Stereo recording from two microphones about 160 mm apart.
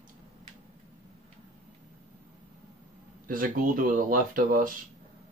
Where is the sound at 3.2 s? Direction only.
60° right (ahead or behind).